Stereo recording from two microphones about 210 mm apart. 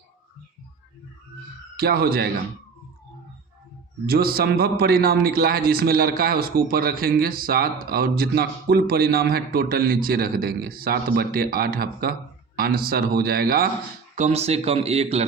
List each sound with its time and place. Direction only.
1.7 s a man's voice: 45° right (ahead or behind)
4.0 s a man's voice: 45° right (ahead or behind)
14.2 s speech: 30° right (ahead or behind)